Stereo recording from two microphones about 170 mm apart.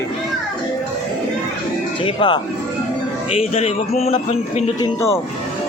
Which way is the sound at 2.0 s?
30° left (ahead or behind).